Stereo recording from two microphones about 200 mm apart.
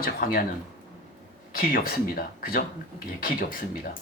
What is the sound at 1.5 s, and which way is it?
Speech, 45° left (ahead or behind).